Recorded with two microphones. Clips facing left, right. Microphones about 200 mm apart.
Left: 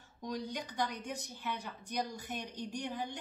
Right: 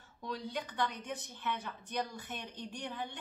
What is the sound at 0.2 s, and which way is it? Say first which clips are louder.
Speech: left 1 dB; 15° left (ahead or behind).